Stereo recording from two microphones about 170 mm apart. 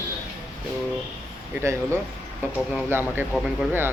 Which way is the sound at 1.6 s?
15° right (ahead or behind).